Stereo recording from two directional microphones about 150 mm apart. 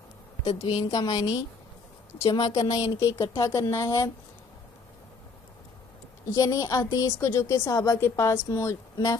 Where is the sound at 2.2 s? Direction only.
40° left (ahead or behind).